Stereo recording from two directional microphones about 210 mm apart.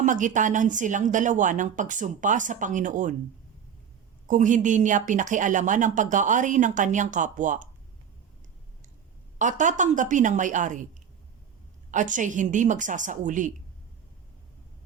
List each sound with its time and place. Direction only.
0.0 s speech: 35° right (ahead or behind)
4.3 s speech: 35° right (ahead or behind)
9.4 s speech: 35° right (ahead or behind)
11.9 s speech: 35° right (ahead or behind)